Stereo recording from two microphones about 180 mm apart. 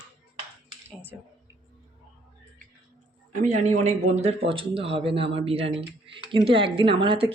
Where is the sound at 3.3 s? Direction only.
45° right (ahead or behind).